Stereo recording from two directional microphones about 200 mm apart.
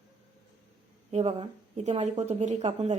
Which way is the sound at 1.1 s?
30° right (ahead or behind).